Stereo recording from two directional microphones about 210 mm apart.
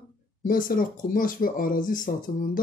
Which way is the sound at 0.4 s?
40° left (ahead or behind).